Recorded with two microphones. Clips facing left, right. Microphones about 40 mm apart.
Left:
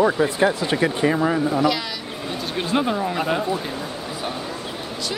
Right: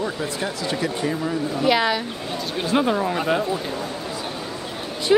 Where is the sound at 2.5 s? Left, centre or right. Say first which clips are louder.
Right 1 dB; centre.